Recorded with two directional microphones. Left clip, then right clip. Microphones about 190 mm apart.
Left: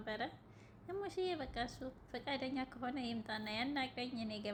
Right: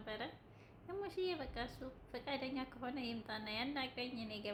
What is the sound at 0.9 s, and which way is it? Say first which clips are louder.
A woman's voice: left 1 dB; 15° left (ahead or behind).